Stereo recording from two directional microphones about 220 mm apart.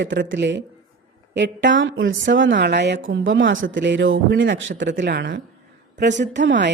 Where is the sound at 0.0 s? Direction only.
55° right (ahead or behind).